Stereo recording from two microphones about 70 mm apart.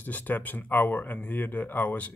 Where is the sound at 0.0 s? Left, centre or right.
Left.